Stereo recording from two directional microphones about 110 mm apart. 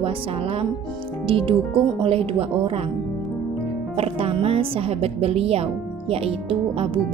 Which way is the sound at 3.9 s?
65° right (ahead or behind).